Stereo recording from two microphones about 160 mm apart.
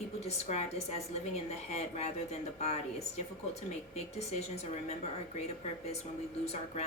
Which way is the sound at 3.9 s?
40° left (ahead or behind).